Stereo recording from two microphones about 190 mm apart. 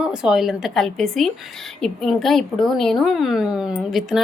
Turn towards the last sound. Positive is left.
turn(degrees=0)  # may be behind; listen again after turning